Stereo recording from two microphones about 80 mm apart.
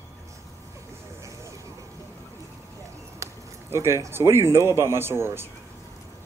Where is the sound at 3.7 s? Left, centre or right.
Right.